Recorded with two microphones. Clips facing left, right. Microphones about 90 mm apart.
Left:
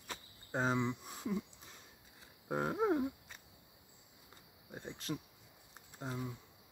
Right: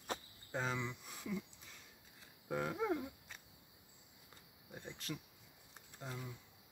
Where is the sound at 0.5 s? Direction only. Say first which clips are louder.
Left 6 dB; 35° left (ahead or behind).